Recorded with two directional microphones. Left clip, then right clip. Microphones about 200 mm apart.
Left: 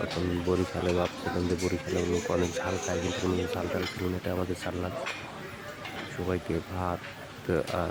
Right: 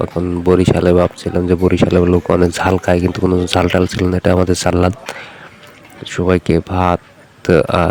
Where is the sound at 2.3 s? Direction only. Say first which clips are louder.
Right 16 dB; 50° right (ahead or behind).